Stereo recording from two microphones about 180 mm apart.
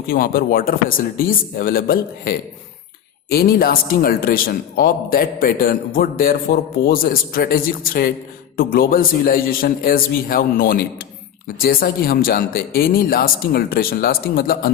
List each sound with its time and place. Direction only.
0.1 s a man's voice: 55° left (ahead or behind)